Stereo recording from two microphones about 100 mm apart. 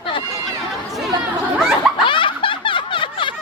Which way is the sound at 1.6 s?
5° right (ahead or behind).